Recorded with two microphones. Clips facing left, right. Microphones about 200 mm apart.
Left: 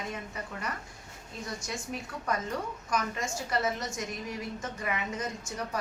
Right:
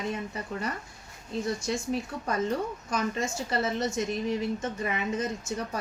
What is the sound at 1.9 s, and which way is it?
A woman's voice, 30° right (ahead or behind).